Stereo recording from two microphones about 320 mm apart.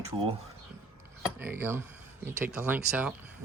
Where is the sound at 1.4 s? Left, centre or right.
Centre.